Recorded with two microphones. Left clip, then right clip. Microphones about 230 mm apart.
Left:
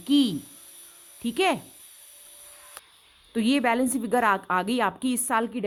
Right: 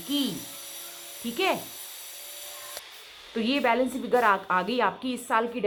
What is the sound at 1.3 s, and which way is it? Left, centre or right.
Speech, left.